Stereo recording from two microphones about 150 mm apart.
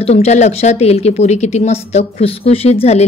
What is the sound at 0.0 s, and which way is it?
Speech, 45° left (ahead or behind).